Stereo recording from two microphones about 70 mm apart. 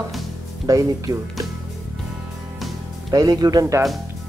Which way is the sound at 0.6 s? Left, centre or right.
Right.